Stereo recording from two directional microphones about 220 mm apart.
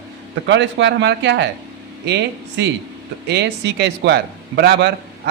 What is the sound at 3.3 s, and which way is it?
A man's voice, 50° right (ahead or behind).